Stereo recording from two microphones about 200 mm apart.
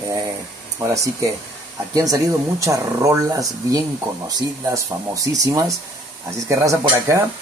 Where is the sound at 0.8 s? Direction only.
15° right (ahead or behind).